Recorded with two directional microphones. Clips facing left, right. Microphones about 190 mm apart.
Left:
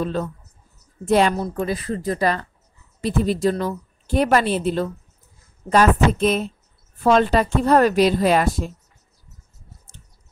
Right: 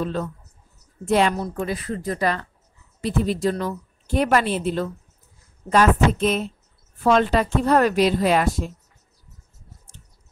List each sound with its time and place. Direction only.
0.0 s a woman's voice: 35° left (ahead or behind)